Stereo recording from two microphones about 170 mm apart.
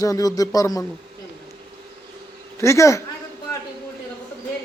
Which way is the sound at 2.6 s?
15° left (ahead or behind).